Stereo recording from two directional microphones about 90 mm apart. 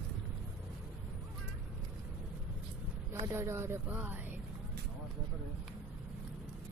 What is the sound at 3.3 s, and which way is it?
Speech, 30° right (ahead or behind).